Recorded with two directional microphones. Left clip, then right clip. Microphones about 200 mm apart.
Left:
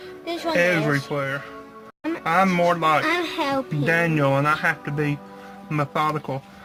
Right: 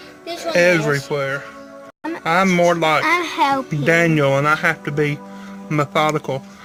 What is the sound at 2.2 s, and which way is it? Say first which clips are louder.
Speech: right 4 dB; 50° right (ahead or behind).